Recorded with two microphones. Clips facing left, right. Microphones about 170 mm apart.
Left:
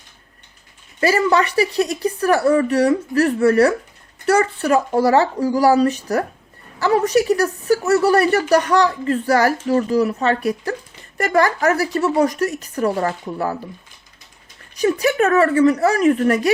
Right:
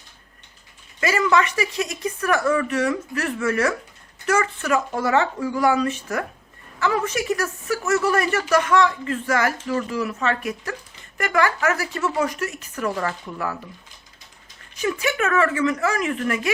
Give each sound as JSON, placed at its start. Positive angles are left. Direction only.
{"t": 0.9, "sound": "a woman's voice", "side_deg": 35}
{"t": 14.8, "sound": "a woman's voice", "side_deg": 35}